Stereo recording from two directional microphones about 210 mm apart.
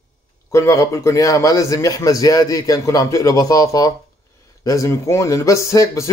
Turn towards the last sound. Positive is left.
turn(degrees=15)  # may be behind; listen again after turning